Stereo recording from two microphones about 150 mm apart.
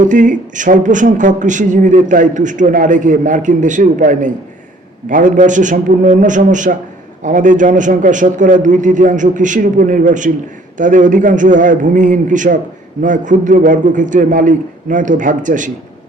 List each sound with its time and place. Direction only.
0.0 s speech: 60° right (ahead or behind)